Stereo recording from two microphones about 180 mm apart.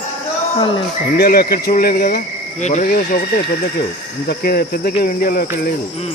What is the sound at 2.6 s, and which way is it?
Speech, 40° left (ahead or behind).